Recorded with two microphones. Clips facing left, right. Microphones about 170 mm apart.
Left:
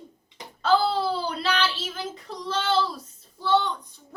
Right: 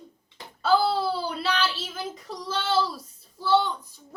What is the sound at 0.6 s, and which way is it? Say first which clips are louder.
Speech: even; 5° right (ahead or behind).